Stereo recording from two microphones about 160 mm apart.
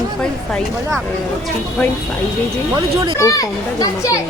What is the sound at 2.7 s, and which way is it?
Speech, 20° right (ahead or behind).